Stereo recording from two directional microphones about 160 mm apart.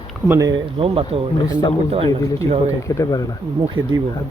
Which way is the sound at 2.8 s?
20° left (ahead or behind).